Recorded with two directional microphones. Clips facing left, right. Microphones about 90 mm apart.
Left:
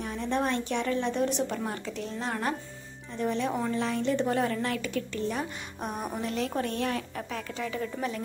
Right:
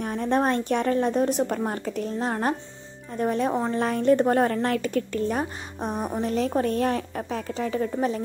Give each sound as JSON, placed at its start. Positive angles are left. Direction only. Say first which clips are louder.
{"t": 0.0, "sound": "a woman's voice", "louder": "right 6 dB", "side_deg": -50}